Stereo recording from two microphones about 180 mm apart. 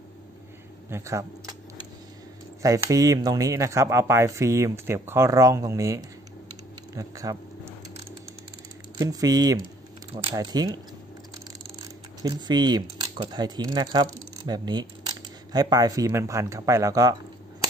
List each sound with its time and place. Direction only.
0.8 s speech: 15° right (ahead or behind)
2.6 s speech: 20° right (ahead or behind)
8.9 s speech: 20° right (ahead or behind)
12.2 s speech: 20° right (ahead or behind)